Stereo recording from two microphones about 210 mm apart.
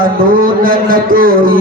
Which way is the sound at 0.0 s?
40° right (ahead or behind).